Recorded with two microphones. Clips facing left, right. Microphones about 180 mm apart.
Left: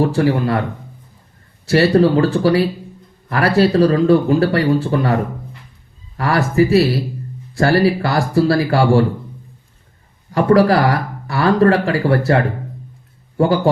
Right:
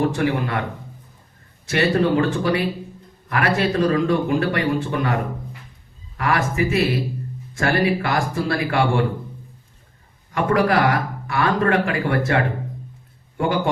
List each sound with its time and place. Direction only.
0.0 s speech: 35° left (ahead or behind)
1.6 s speech: 35° left (ahead or behind)
10.3 s a man's voice: 35° left (ahead or behind)